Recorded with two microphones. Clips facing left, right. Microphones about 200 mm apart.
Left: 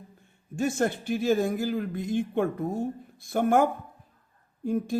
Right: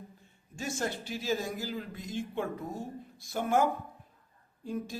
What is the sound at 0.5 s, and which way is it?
Speech, 55° left (ahead or behind).